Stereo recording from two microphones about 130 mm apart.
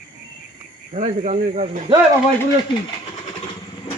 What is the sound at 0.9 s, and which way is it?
Speech, 65° right (ahead or behind).